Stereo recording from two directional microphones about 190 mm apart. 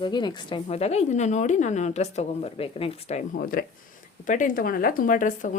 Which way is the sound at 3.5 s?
50° left (ahead or behind).